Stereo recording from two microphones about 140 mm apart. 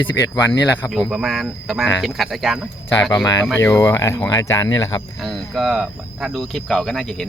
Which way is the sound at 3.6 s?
20° left (ahead or behind).